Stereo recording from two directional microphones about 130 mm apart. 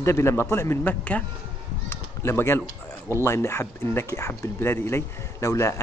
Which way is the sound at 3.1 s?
20° left (ahead or behind).